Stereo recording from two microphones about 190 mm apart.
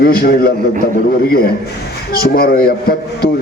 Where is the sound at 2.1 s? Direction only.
55° left (ahead or behind).